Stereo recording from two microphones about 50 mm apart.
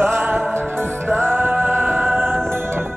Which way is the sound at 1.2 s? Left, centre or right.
Right.